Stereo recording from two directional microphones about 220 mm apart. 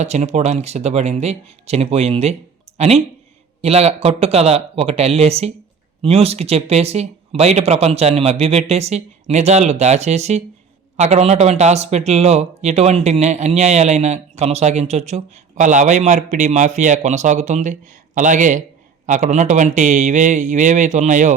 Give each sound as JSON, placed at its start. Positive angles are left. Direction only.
{"t": 0.0, "sound": "speech", "side_deg": -30}